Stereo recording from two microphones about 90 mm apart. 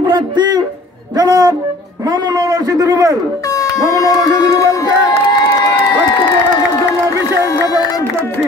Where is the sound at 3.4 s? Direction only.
40° left (ahead or behind).